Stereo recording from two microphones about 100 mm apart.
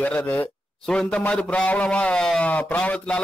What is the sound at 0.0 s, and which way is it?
A man's voice, 15° left (ahead or behind).